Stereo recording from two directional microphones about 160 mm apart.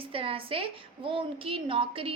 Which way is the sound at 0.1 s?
35° right (ahead or behind).